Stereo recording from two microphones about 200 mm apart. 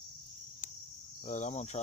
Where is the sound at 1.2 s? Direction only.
35° left (ahead or behind).